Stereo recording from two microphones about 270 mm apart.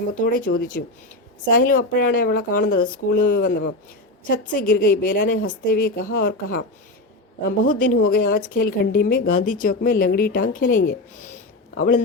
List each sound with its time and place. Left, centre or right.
0.1 s speech: left